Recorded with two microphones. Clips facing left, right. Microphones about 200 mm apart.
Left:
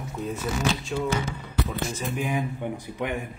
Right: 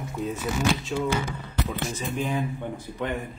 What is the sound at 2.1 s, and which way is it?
A man's voice, 10° left (ahead or behind).